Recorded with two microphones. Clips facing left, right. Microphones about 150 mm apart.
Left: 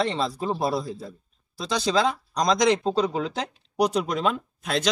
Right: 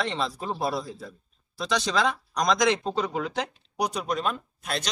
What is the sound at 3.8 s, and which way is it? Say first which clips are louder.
Speech: left 5 dB; 65° left (ahead or behind).